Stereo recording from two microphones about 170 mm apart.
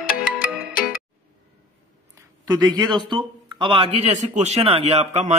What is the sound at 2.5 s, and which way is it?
A man's voice, 25° right (ahead or behind).